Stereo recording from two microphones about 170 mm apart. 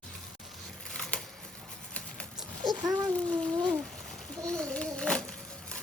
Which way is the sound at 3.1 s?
5° left (ahead or behind).